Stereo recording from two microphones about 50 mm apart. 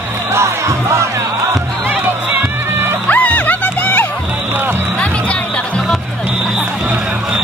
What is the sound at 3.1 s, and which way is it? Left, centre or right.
Music, left.